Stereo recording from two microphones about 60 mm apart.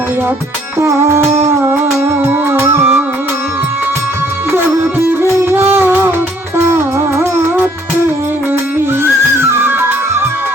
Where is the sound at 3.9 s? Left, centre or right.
Right.